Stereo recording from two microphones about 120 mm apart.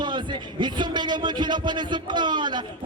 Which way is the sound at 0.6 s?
40° right (ahead or behind).